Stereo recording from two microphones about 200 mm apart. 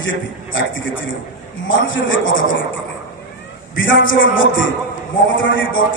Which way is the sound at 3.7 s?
70° left (ahead or behind).